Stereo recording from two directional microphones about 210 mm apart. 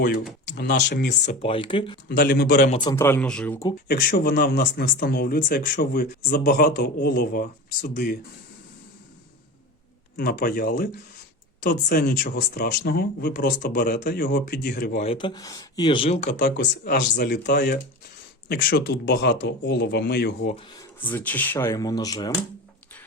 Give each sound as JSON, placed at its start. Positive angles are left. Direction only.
{"t": 0.4, "sound": "speech", "side_deg": 55}
{"t": 1.2, "sound": "speech", "side_deg": 30}
{"t": 2.0, "sound": "speech", "side_deg": 50}
{"t": 2.7, "sound": "speech", "side_deg": 15}
{"t": 3.8, "sound": "speech", "side_deg": 45}
{"t": 10.2, "sound": "speech", "side_deg": 45}
{"t": 14.9, "sound": "speech", "side_deg": 30}
{"t": 16.4, "sound": "speech", "side_deg": 55}
{"t": 20.7, "sound": "speech", "side_deg": 10}